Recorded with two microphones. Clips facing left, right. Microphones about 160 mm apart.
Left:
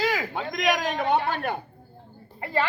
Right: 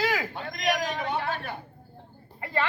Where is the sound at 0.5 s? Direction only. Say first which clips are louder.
Left 3 dB; 60° left (ahead or behind).